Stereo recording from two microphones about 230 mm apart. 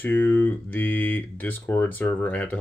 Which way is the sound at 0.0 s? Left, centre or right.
Centre.